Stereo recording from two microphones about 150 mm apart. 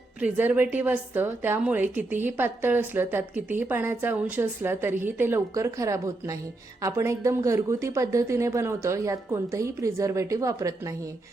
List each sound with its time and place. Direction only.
0.2 s a woman's voice: 10° right (ahead or behind)